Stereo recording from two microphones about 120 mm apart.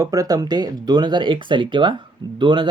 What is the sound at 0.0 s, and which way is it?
Speech, 30° right (ahead or behind).